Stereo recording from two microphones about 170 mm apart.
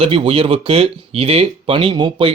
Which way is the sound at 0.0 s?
35° right (ahead or behind).